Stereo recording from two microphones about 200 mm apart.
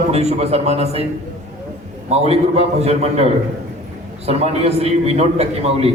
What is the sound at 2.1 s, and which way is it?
A man's voice, 30° right (ahead or behind).